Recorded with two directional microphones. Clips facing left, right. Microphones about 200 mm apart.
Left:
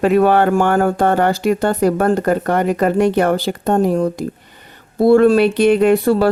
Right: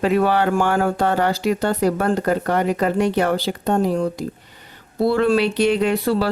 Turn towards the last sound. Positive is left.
turn(degrees=50)  # may be behind; listen again after turning